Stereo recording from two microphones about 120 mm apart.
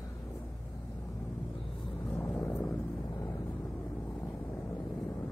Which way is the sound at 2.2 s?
15° left (ahead or behind).